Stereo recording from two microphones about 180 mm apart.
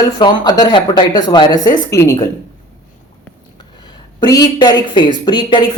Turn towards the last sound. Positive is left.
turn(degrees=25)  # may be behind; listen again after turning